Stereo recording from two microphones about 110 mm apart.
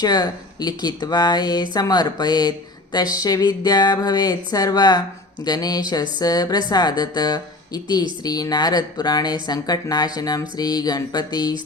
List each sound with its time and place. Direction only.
0.0 s speech: 35° left (ahead or behind)